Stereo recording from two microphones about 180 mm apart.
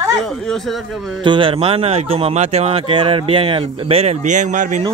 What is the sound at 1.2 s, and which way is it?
Speech, 25° right (ahead or behind).